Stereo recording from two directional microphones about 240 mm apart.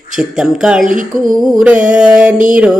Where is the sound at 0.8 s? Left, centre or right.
Right.